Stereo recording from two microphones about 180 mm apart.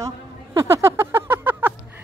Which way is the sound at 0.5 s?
15° right (ahead or behind).